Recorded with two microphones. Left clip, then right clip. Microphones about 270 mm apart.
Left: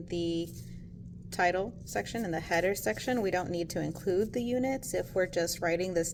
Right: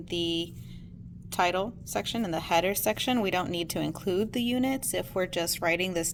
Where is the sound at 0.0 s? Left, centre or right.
Right.